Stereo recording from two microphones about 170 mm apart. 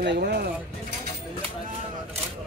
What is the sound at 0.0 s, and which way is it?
Speech, 80° right.